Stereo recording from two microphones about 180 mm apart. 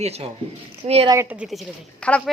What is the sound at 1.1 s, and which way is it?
A woman's voice, 10° right (ahead or behind).